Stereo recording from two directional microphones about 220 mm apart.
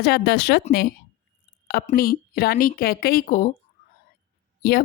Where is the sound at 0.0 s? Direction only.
45° left (ahead or behind).